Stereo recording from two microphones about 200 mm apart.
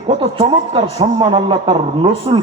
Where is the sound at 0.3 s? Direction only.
25° right (ahead or behind).